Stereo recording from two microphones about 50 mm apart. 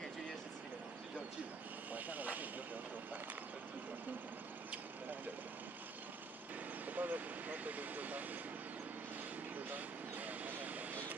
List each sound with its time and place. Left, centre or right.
1.9 s speech: right
6.9 s speech: right
9.7 s vehicle: right